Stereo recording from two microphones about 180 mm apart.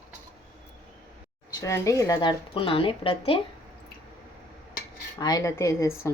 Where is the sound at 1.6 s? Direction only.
15° left (ahead or behind).